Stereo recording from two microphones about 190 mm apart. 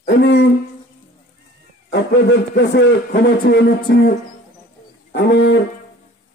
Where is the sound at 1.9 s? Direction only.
65° left (ahead or behind).